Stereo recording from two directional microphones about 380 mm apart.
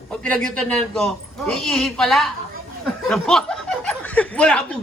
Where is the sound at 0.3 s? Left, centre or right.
Centre.